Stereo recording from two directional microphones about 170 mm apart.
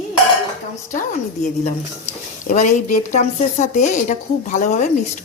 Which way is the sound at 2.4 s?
45° left (ahead or behind).